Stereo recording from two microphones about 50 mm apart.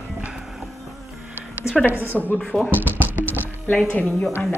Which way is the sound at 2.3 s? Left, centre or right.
Centre.